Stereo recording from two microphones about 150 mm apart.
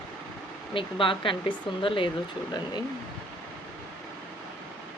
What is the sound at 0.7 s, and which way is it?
Speech, 35° left (ahead or behind).